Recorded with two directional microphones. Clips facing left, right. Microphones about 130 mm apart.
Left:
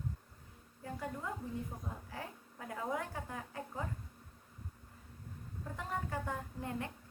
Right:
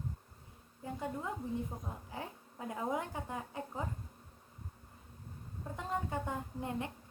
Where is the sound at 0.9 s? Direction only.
20° right (ahead or behind).